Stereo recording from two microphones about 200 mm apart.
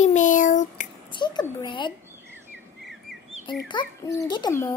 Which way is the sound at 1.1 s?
20° left (ahead or behind).